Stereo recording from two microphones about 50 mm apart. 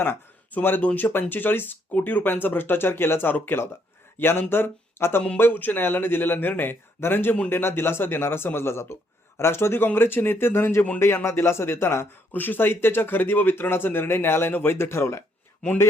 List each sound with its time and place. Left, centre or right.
0.8 s speech: left
1.9 s speech: left
11.0 s speech: left
11.3 s speech: left
12.3 s speech: left